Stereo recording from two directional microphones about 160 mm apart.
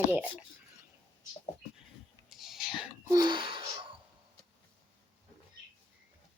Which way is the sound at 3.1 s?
25° right (ahead or behind).